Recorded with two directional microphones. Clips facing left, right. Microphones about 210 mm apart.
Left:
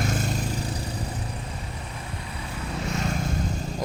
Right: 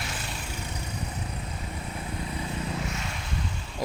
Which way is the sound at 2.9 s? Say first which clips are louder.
Left 7 dB; 40° left (ahead or behind).